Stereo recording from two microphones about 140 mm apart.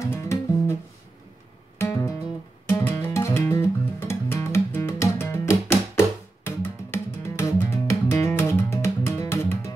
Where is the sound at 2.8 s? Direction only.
20° left (ahead or behind).